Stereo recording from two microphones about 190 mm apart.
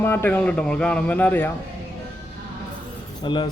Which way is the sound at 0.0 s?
10° left (ahead or behind).